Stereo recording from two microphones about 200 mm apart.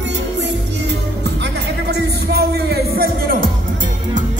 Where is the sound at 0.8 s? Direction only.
60° right (ahead or behind).